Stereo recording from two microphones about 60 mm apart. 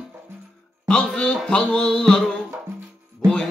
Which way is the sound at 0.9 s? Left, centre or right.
Centre.